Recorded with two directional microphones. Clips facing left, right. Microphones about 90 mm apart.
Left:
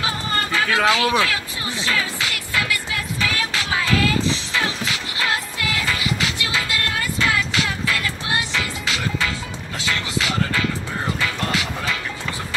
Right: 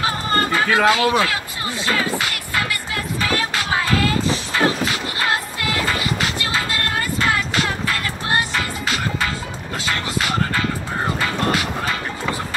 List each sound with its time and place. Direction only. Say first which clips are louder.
0.0 s music: right 4 dB; 40° right (ahead or behind)
0.8 s speech: right 2 dB; 40° right (ahead or behind)
1.9 s music: right 3 dB; 45° right (ahead or behind)